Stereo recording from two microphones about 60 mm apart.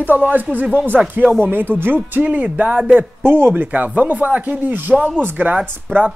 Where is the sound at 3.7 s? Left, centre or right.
Right.